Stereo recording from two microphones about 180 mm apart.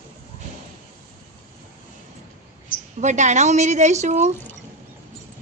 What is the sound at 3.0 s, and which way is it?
A woman's voice, 40° right (ahead or behind).